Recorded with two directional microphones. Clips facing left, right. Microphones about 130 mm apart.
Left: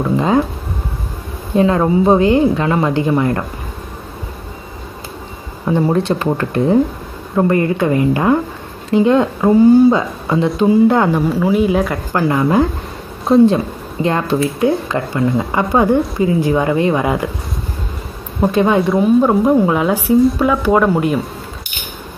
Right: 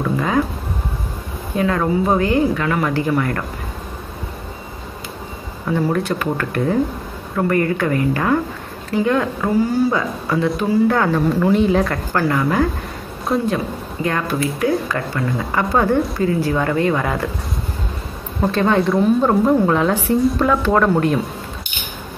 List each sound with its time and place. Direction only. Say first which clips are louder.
0.0 s speech: left 5 dB; 25° left (ahead or behind)
1.6 s speech: left 5 dB; 25° left (ahead or behind)
5.7 s speech: left 4 dB; 25° left (ahead or behind); by 12.0 s 5° left (ahead or behind)
12.1 s speech: left 6 dB; 20° left (ahead or behind)
18.4 s speech: left 3 dB; 15° left (ahead or behind)